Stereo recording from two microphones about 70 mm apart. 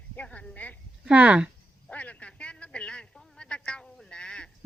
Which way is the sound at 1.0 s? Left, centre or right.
Centre.